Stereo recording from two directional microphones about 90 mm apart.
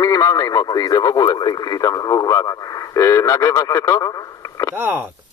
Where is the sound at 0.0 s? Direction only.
40° left (ahead or behind).